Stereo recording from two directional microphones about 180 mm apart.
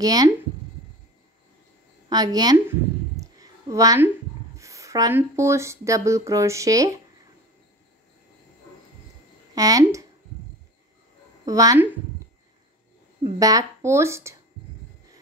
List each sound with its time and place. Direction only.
0.0 s a woman's voice: 20° right (ahead or behind)
2.0 s a sound: 20° right (ahead or behind)
4.6 s speech: 15° right (ahead or behind)
9.6 s a woman's voice: 20° right (ahead or behind)
11.4 s a woman's voice: 20° right (ahead or behind)
13.4 s speech: 20° right (ahead or behind)